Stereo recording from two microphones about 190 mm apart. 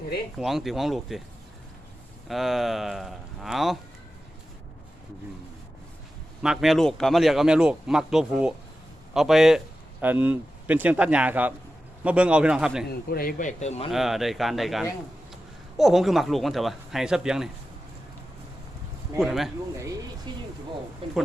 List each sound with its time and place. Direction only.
0.3 s a man's voice: centre (ahead or behind)
2.2 s a man's voice: centre (ahead or behind)
6.4 s a man's voice: centre (ahead or behind)
12.9 s speech: 50° left (ahead or behind); by 13.9 s 35° left (ahead or behind)
13.9 s a man's voice: centre (ahead or behind)
19.2 s a man's voice: centre (ahead or behind)
20.3 s a sound: 25° right (ahead or behind)
21.0 s speech: 30° right (ahead or behind)